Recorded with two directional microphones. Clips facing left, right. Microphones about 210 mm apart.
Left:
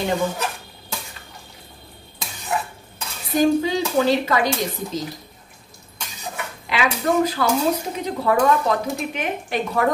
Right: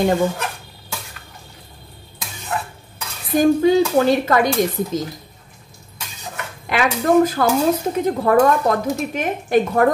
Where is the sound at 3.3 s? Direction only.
50° right (ahead or behind).